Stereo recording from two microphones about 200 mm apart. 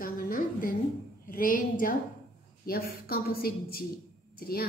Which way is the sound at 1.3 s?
45° left (ahead or behind).